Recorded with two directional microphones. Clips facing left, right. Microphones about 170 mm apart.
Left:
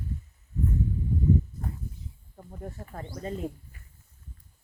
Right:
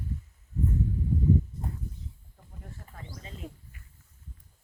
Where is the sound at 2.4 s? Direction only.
50° left (ahead or behind).